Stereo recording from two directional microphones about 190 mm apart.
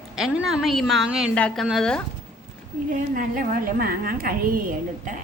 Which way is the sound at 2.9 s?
45° right (ahead or behind).